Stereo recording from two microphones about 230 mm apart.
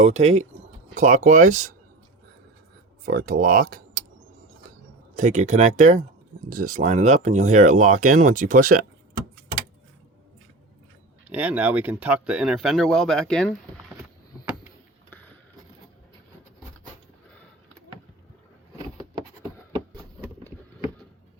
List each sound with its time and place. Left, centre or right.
0.2 s speech: right
3.1 s speech: right
5.1 s speech: right
11.3 s speech: centre
19.1 s a sound: right